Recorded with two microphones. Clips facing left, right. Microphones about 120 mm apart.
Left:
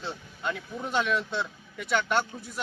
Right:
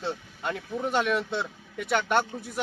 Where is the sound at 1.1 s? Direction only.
55° right (ahead or behind).